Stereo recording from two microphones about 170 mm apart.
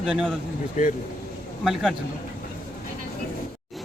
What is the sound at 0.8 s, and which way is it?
Speech, 45° left (ahead or behind).